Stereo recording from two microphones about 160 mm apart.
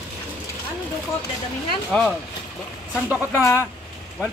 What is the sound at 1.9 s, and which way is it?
Speech, 5° left (ahead or behind).